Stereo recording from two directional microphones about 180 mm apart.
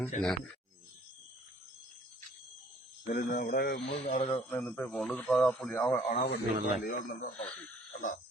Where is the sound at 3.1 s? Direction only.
50° left (ahead or behind).